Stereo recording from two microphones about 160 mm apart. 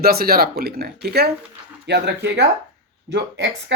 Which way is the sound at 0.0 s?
70° right (ahead or behind).